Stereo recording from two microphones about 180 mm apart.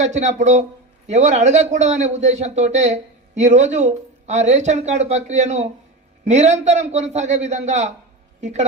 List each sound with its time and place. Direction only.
0.0 s a man's voice: 40° right (ahead or behind)